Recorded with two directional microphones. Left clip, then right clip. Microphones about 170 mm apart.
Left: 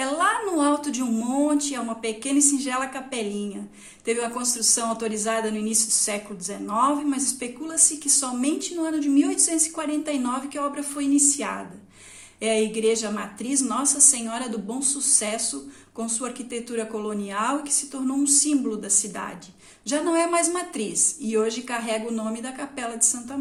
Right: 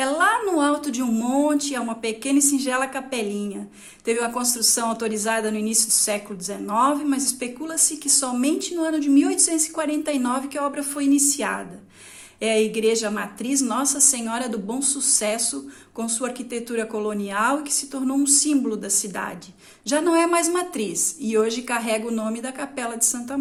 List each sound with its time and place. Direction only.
0.0 s a woman's voice: 25° right (ahead or behind)